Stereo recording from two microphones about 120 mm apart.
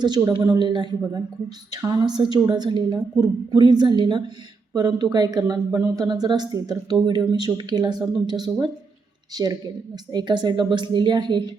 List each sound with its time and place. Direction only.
0.0 s a woman's voice: 35° right (ahead or behind)